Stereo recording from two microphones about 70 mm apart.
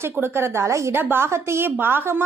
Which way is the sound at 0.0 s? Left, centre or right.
Right.